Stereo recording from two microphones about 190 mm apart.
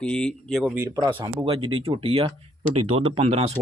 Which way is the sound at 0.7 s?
15° right (ahead or behind).